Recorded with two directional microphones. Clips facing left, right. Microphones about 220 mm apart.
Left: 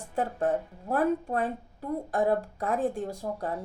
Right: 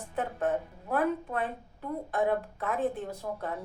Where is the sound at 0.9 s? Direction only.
40° left (ahead or behind).